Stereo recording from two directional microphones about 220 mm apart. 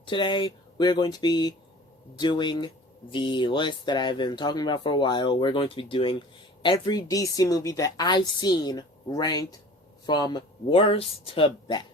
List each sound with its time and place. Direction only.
0.0 s speech: 20° left (ahead or behind)